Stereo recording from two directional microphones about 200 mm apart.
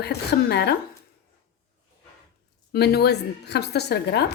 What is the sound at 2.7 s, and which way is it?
A woman's voice, 55° left (ahead or behind).